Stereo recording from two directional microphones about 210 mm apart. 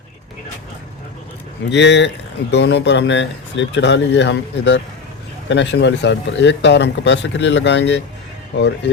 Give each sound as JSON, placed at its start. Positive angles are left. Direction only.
{"t": 1.7, "sound": "speech", "side_deg": 55}